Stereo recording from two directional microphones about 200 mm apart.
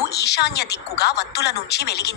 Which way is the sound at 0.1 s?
55° left (ahead or behind).